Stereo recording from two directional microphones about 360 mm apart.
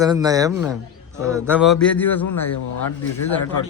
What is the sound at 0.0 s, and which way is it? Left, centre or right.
A man's voice, centre.